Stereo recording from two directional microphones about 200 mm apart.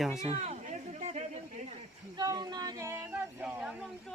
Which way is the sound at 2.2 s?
20° right (ahead or behind).